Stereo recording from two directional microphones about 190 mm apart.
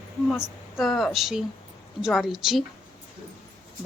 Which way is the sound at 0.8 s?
Centre (ahead or behind).